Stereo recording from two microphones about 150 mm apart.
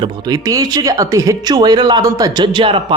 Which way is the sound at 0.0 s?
25° right (ahead or behind).